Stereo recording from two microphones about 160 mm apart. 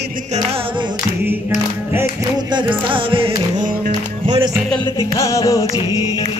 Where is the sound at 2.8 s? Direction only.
35° right (ahead or behind).